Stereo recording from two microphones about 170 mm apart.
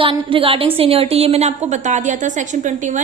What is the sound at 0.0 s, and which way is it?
A woman's voice, 30° right (ahead or behind).